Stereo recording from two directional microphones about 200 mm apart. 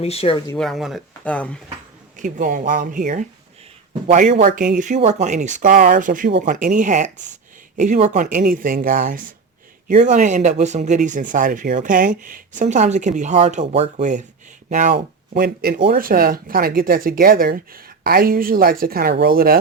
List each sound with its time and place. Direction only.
0.0 s speech: 30° left (ahead or behind)
0.5 s speech: centre (ahead or behind)
2.1 s speech: 40° right (ahead or behind)